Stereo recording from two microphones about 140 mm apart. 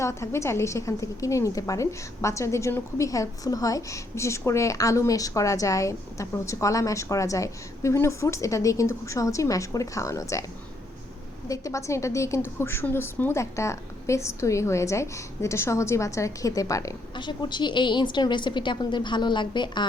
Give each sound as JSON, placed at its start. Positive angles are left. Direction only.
{"t": 0.0, "sound": "a woman's voice", "side_deg": 20}
{"t": 11.4, "sound": "a woman's voice", "side_deg": 25}